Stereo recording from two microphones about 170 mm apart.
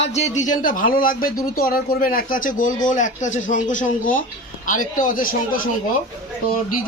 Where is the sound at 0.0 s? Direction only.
40° left (ahead or behind).